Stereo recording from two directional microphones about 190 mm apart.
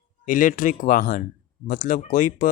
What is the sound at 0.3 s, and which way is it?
Speech, 45° left (ahead or behind).